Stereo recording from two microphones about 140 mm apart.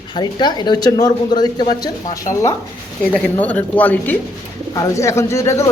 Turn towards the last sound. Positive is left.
turn(degrees=20)  # may be behind; listen again after turning